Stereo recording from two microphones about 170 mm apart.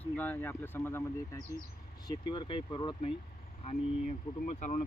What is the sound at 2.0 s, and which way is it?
Speech, 25° left (ahead or behind).